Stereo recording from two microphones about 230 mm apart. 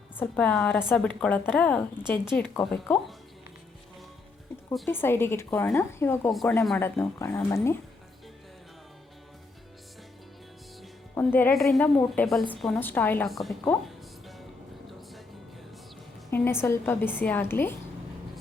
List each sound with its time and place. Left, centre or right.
0.2 s a woman's voice: centre
4.7 s a woman's voice: centre
11.1 s a woman's voice: centre
16.3 s a woman's voice: centre